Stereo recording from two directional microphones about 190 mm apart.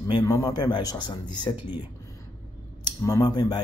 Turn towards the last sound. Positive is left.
turn(degrees=20)  # may be behind; listen again after turning